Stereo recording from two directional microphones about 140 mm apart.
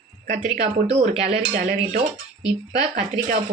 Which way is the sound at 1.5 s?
70° right (ahead or behind).